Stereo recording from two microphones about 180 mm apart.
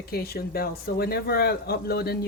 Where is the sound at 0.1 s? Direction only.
60° left (ahead or behind).